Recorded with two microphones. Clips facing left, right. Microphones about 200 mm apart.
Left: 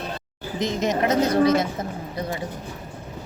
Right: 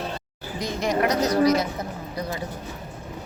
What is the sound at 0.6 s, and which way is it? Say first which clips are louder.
A woman's voice: left 1 dB; 20° left (ahead or behind).